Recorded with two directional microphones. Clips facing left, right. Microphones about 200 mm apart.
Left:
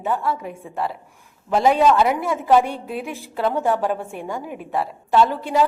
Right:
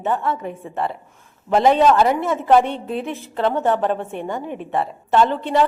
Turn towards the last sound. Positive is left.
turn(degrees=5)  # may be behind; listen again after turning